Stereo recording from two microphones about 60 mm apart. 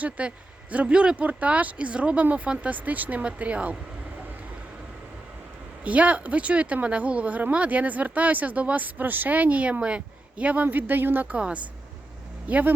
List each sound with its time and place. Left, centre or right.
0.0 s speech: right
5.8 s speech: right
11.3 s speech: centre